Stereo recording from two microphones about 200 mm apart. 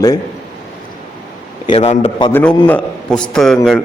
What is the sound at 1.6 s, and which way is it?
Speech, 30° left (ahead or behind).